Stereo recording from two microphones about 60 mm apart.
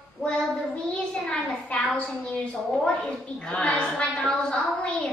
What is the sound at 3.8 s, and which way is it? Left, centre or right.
Speech, centre.